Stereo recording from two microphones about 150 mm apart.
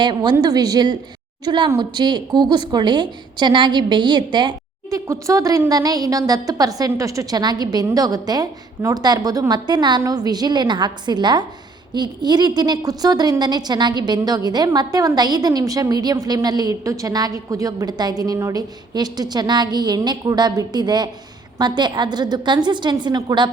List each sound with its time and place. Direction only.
0.0 s a woman's voice: 30° right (ahead or behind)